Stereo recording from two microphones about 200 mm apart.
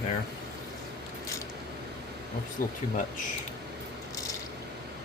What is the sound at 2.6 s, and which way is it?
Speech, 45° left (ahead or behind).